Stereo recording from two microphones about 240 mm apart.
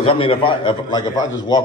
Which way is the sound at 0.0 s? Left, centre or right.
Left.